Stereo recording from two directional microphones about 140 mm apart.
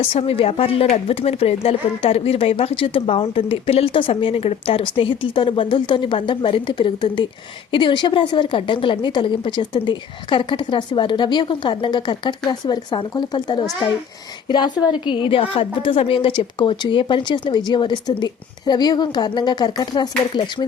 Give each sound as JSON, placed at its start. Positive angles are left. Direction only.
{"t": 0.0, "sound": "a woman's voice", "side_deg": 45}